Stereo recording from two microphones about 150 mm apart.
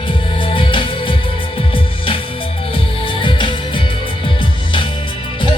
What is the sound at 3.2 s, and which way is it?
Music, 35° left (ahead or behind).